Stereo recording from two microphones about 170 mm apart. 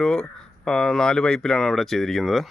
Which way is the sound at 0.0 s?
5° left (ahead or behind).